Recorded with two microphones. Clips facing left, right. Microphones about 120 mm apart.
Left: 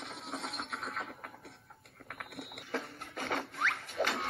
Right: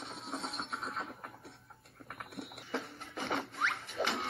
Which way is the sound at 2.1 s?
65° left (ahead or behind).